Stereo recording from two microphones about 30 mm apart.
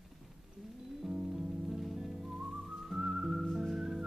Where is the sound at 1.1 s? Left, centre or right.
Right.